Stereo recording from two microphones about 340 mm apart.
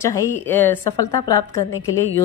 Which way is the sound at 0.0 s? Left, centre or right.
Centre.